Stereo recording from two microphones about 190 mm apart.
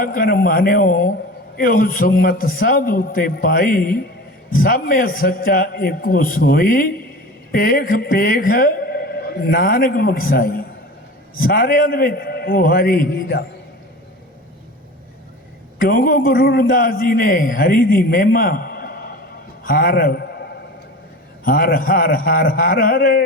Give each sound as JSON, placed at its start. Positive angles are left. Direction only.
{"t": 0.0, "sound": "a man's voice", "side_deg": 50}
{"t": 15.8, "sound": "a man's voice", "side_deg": 50}